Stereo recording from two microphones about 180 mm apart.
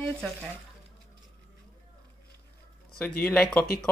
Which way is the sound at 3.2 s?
5° left (ahead or behind).